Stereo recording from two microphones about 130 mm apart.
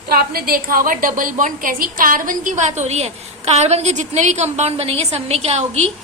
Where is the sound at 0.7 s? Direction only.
90° right.